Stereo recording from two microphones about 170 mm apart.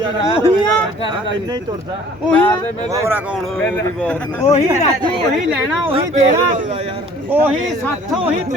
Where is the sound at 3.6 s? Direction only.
10° left (ahead or behind).